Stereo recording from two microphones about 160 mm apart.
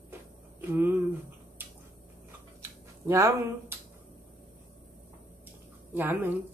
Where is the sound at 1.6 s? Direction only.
15° right (ahead or behind).